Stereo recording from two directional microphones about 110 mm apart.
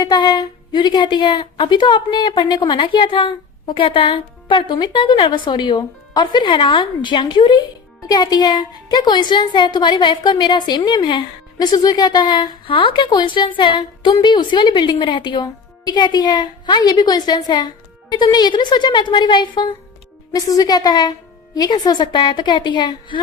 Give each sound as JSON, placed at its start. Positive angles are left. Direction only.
{"t": 0.0, "sound": "a woman's voice", "side_deg": 40}